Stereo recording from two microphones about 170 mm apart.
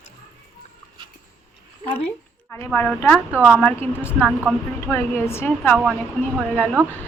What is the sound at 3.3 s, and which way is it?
Speech, 5° right (ahead or behind).